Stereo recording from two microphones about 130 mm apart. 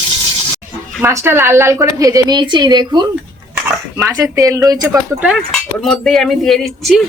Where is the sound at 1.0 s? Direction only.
20° right (ahead or behind).